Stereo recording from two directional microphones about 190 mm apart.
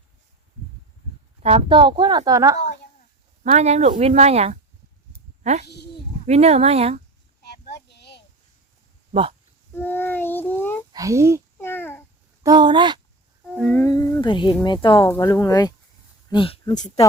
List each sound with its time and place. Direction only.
1.4 s speech: 30° right (ahead or behind)
3.4 s speech: 35° right (ahead or behind)
5.4 s a sound: 35° right (ahead or behind)
5.6 s speech: 60° left (ahead or behind)
6.2 s speech: 35° right (ahead or behind)
7.4 s a sound: 60° left (ahead or behind)
9.7 s child singing: 10° left (ahead or behind)
10.9 s a child's voice: 15° right (ahead or behind)
11.5 s babbling: 10° left (ahead or behind)
12.4 s speech: 20° right (ahead or behind)
13.5 s humming: centre (ahead or behind)
13.7 s a sound: 15° left (ahead or behind)
14.6 s speech: 25° left (ahead or behind)